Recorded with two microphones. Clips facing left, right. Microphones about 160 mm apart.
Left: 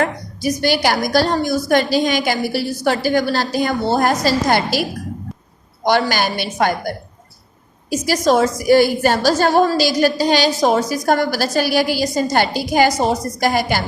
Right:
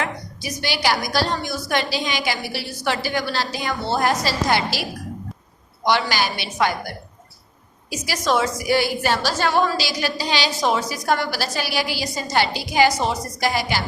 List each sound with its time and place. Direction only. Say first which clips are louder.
0.0 s a woman's voice: left 8 dB; 45° left (ahead or behind)